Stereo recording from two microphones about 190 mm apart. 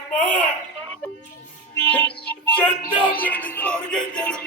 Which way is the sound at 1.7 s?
10° left (ahead or behind).